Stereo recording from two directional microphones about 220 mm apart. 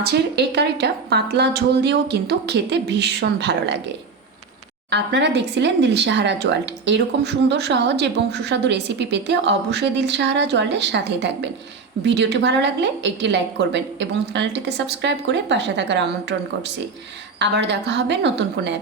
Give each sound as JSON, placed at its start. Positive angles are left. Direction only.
{"t": 0.0, "sound": "speech", "side_deg": -50}
{"t": 4.9, "sound": "speech", "side_deg": -50}